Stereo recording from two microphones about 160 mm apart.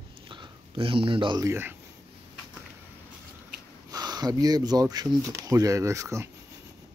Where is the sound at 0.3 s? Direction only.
30° right (ahead or behind).